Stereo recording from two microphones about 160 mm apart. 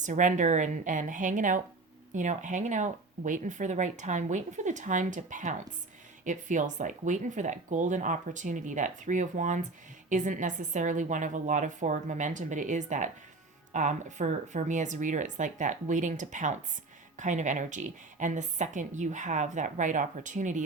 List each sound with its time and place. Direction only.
0.0 s speech: 50° right (ahead or behind)